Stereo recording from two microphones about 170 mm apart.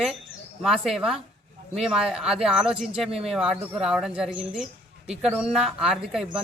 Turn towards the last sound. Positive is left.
turn(degrees=0)  # may be behind; listen again after turning